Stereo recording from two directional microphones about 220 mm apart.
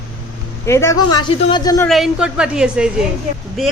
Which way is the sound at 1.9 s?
Centre (ahead or behind).